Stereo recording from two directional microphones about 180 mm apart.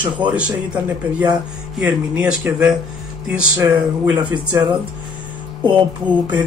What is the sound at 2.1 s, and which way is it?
Speech, 5° right (ahead or behind).